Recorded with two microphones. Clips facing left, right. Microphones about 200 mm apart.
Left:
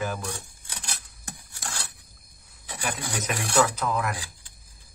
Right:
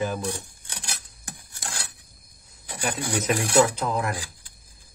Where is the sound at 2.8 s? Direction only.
30° right (ahead or behind).